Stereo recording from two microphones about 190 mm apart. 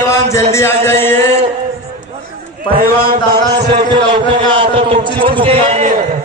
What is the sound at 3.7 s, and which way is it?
A man's voice, 25° right (ahead or behind).